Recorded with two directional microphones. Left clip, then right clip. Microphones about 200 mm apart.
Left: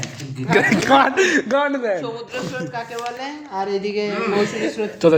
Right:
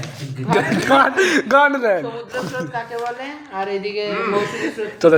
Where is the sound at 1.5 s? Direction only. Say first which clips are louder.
Right 5 dB; 5° right (ahead or behind).